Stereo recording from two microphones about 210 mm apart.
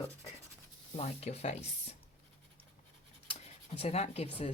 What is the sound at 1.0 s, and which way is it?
Speech, 30° left (ahead or behind).